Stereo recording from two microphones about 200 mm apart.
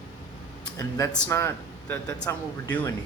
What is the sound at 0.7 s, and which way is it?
Speech, 15° left (ahead or behind).